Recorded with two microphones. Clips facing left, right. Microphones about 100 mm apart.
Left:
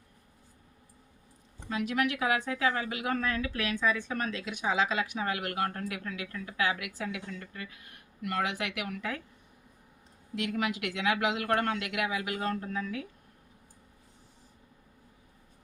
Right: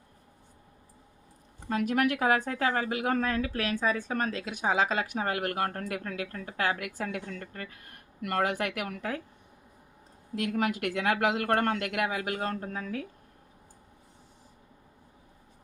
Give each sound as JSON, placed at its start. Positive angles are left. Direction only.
{"t": 1.7, "sound": "a woman's voice", "side_deg": -50}
{"t": 10.3, "sound": "a woman's voice", "side_deg": -45}